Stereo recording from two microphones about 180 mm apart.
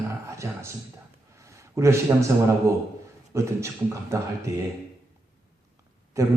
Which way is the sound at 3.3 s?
15° right (ahead or behind).